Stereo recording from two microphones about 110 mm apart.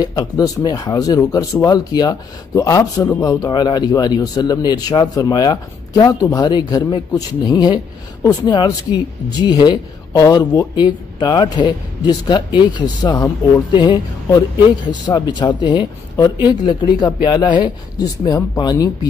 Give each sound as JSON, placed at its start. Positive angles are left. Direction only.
{"t": 0.0, "sound": "speech", "side_deg": 35}